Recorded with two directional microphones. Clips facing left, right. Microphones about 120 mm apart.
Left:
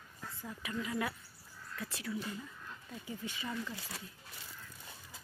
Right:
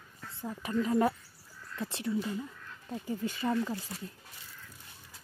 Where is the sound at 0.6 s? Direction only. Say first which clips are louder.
Right 10 dB; 40° right (ahead or behind).